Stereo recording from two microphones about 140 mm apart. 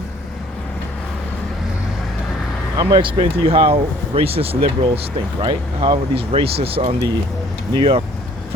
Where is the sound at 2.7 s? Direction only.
35° right (ahead or behind).